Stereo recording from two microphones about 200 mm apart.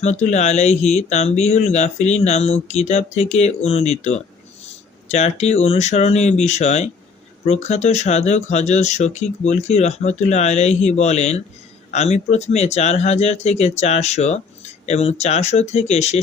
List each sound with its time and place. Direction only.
0.0 s speech: 35° left (ahead or behind)